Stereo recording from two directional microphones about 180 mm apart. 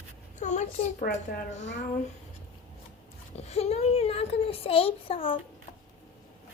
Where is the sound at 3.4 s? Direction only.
35° left (ahead or behind).